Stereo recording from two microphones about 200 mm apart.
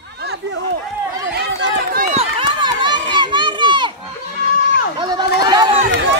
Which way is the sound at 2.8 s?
20° right (ahead or behind).